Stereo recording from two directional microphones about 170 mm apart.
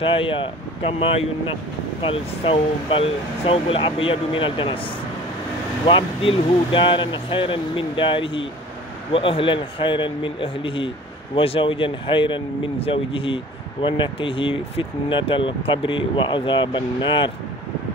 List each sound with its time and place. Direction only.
0.0 s speech: 30° left (ahead or behind)
5.9 s speech: 30° left (ahead or behind)